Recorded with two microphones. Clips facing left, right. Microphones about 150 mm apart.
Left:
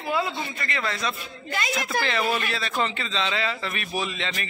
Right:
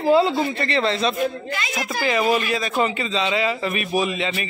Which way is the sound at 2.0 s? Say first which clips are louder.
Right 10 dB; 15° right (ahead or behind).